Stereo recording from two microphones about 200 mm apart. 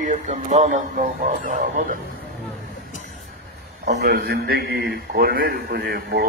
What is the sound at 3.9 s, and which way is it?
A man's voice, 55° right (ahead or behind).